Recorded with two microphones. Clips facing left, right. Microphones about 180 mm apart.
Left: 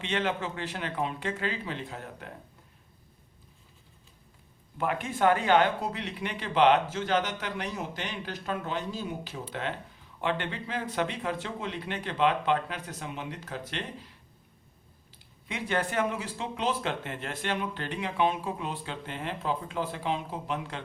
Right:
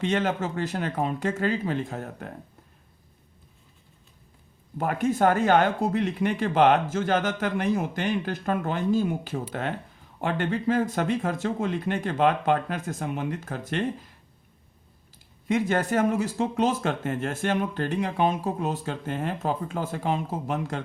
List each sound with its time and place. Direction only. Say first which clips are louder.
0.0 s speech: right 5 dB; 45° right (ahead or behind)
4.8 s speech: right 4 dB; 45° right (ahead or behind)
15.4 s speech: right 7 dB; 45° right (ahead or behind)